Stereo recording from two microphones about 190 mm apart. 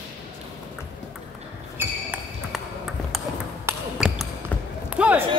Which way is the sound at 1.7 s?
10° right (ahead or behind).